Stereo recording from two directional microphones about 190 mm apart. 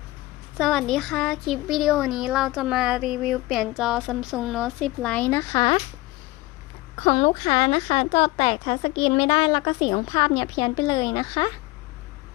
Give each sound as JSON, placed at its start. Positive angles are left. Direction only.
{"t": 0.6, "sound": "speech", "side_deg": 0}
{"t": 7.0, "sound": "a woman's voice", "side_deg": 25}